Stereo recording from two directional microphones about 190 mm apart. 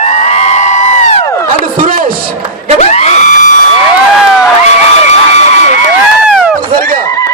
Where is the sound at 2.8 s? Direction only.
35° left (ahead or behind).